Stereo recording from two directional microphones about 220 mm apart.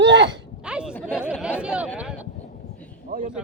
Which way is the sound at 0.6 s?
5° right (ahead or behind).